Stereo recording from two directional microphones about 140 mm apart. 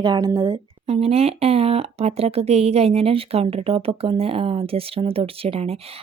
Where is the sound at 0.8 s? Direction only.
45° right (ahead or behind).